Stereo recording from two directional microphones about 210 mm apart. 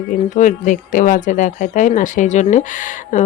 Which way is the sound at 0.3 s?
35° left (ahead or behind).